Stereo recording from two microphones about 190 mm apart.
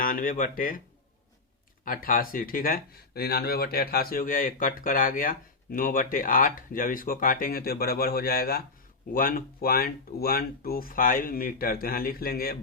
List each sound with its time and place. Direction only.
0.0 s speech: 45° left (ahead or behind)
1.8 s speech: 45° left (ahead or behind)